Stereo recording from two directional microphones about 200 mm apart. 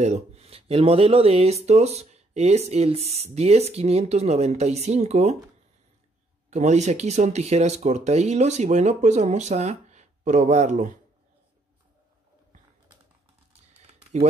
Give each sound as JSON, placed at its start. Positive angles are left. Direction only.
{"t": 0.0, "sound": "speech", "side_deg": -30}
{"t": 6.5, "sound": "speech", "side_deg": -35}